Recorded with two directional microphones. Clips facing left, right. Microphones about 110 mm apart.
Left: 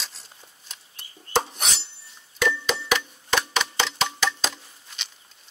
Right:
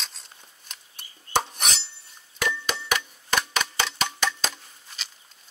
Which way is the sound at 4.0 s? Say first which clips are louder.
Left 2 dB; 30° left (ahead or behind).